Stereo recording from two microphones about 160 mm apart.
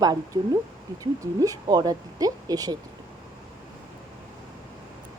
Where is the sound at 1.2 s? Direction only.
20° right (ahead or behind).